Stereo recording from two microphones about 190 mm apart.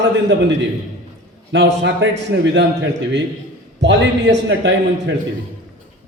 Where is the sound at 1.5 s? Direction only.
70° right (ahead or behind).